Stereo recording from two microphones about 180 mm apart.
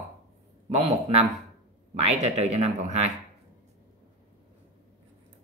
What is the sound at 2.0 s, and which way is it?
Speech, 35° right (ahead or behind).